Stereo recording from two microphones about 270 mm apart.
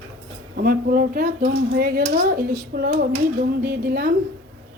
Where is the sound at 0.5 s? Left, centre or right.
Right.